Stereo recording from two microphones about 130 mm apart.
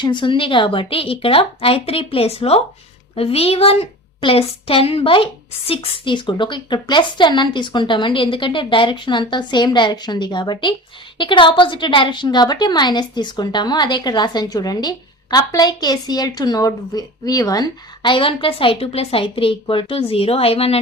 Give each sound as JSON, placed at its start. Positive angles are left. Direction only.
{"t": 0.0, "sound": "a woman's voice", "side_deg": 40}